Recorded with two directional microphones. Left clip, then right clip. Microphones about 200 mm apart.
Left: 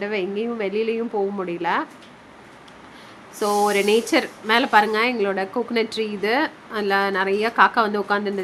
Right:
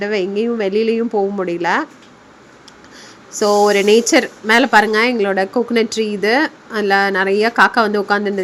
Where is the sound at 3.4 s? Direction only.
20° right (ahead or behind).